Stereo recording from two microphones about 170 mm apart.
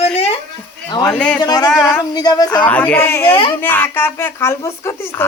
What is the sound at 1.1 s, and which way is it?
Speech, 5° left (ahead or behind).